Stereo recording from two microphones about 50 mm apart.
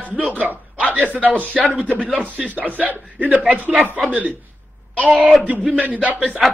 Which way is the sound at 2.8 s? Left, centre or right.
Left.